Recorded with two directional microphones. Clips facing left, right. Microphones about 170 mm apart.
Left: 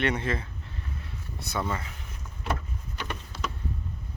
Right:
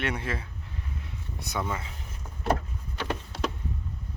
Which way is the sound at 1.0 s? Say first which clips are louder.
Even; 15° right (ahead or behind).